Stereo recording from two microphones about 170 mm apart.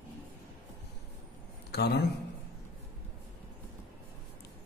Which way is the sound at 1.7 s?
70° left (ahead or behind).